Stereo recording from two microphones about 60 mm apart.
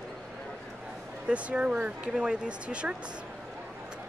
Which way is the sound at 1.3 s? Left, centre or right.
Right.